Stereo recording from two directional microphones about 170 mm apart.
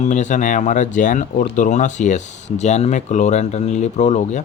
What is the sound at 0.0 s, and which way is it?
Speech, 45° left (ahead or behind).